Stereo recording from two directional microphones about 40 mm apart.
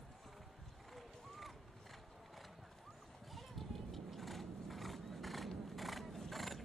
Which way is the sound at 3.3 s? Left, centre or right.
Centre.